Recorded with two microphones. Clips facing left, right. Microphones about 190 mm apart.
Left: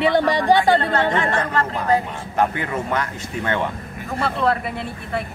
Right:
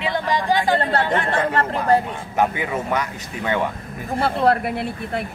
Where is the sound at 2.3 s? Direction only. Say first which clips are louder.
Even; 5° right (ahead or behind).